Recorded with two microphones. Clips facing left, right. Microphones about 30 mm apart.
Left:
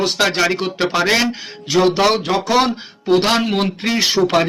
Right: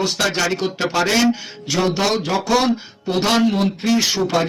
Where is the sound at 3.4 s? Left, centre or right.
Left.